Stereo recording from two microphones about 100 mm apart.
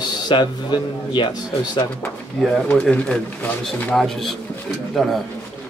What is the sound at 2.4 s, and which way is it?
Speech, 10° left (ahead or behind).